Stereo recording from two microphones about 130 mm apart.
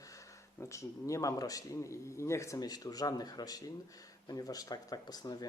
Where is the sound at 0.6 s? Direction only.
25° left (ahead or behind).